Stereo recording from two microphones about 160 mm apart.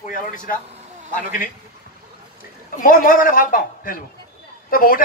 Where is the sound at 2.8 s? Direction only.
60° left (ahead or behind).